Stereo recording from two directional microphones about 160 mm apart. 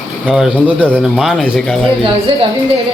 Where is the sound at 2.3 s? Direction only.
35° right (ahead or behind).